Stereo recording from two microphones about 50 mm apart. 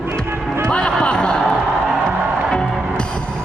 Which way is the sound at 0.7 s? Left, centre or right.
Centre.